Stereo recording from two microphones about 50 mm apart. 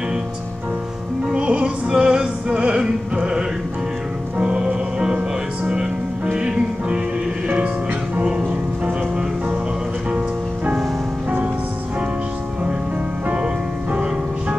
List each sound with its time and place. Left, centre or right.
1.3 s music: right
6.3 s music: centre
10.1 s music: right